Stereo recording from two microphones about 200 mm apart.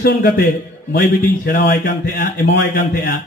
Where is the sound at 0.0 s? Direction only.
50° left (ahead or behind).